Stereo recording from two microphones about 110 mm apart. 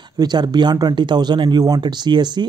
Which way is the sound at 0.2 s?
40° right (ahead or behind).